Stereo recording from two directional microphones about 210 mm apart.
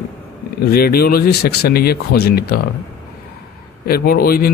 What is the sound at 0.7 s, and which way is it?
A man's voice, 45° left (ahead or behind).